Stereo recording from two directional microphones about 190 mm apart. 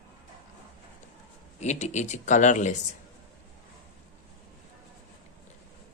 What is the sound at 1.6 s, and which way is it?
Speech, 35° left (ahead or behind).